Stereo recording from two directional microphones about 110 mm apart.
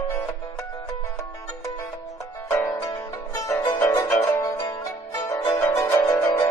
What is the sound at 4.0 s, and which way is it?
Zither, 30° left (ahead or behind).